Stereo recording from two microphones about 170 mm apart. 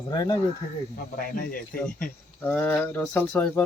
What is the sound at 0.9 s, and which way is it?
Speech, 60° left (ahead or behind).